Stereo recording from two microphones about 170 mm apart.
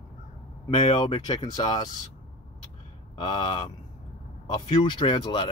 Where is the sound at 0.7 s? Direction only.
45° left (ahead or behind).